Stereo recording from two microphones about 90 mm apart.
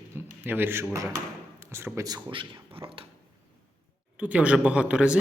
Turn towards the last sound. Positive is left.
turn(degrees=-15)  # may be behind; listen again after turning